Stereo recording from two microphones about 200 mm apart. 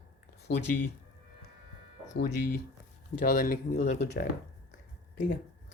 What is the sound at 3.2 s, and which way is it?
Speech, 40° left (ahead or behind).